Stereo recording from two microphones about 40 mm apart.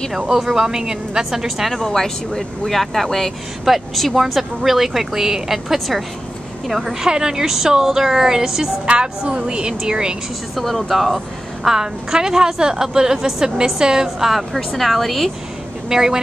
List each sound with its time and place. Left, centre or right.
0.3 s a woman's voice: centre
1.7 s a woman's voice: centre
8.8 s a woman's voice: right
10.5 s speech: centre
11.6 s a woman's voice: centre
14.3 s speech: centre
15.9 s a woman's voice: centre